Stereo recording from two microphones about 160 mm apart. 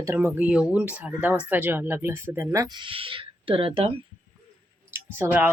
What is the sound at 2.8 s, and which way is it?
Speech, 35° right (ahead or behind).